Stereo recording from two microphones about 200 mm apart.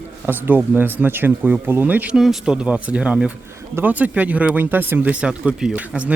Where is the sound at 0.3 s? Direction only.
10° right (ahead or behind).